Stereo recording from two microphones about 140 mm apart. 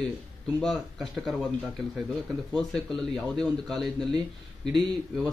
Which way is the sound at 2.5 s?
5° left (ahead or behind).